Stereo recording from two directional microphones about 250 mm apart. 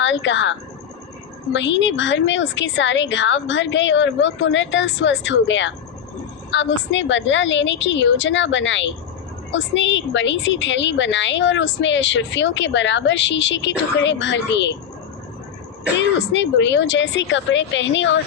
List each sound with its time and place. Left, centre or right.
0.0 s a woman's voice: left
1.5 s a woman's voice: left
16.0 s a woman's voice: left